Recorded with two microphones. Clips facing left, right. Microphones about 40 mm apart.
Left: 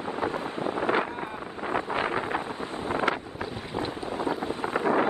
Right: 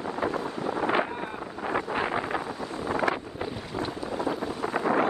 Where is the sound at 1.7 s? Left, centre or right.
Left.